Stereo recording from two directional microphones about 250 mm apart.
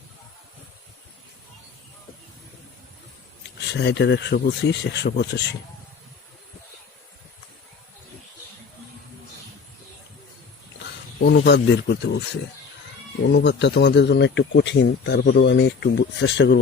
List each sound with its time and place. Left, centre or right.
3.7 s speech: left
11.2 s speech: left
13.2 s speech: left